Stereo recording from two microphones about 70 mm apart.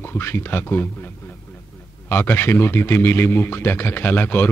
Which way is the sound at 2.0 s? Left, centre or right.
Left.